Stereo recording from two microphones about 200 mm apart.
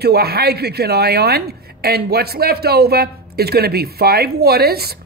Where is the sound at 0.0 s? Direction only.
50° right (ahead or behind).